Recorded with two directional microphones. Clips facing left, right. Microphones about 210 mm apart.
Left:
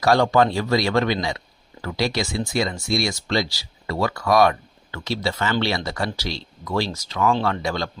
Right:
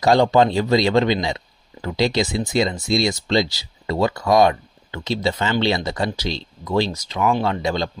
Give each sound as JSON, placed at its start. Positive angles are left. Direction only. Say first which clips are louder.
{"t": 0.0, "sound": "speech", "louder": "right 2 dB", "side_deg": -20}